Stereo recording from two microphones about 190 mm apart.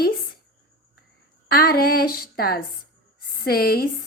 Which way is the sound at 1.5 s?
55° left (ahead or behind).